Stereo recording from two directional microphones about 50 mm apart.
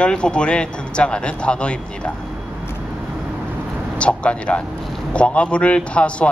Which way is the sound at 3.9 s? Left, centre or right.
Left.